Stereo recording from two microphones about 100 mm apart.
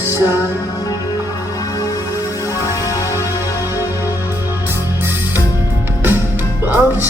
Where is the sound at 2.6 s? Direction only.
35° left (ahead or behind).